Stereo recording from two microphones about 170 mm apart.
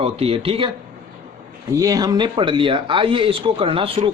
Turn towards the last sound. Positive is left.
turn(degrees=-30)  # may be behind; listen again after turning